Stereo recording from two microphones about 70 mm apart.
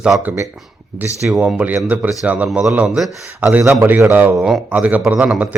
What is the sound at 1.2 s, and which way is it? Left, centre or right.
Speech, right.